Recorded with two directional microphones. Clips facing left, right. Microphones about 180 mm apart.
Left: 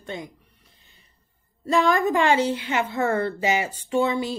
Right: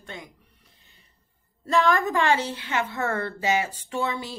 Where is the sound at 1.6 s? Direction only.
15° left (ahead or behind).